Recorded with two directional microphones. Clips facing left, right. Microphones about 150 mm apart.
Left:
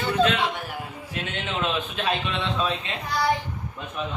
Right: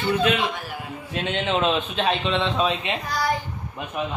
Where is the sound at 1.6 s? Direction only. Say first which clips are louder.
Right 4 dB; 25° right (ahead or behind).